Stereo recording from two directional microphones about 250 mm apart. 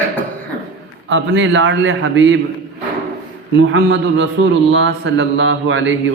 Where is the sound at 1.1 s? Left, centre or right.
Right.